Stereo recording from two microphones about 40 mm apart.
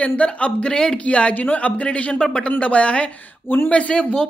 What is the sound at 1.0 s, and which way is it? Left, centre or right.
Speech, left.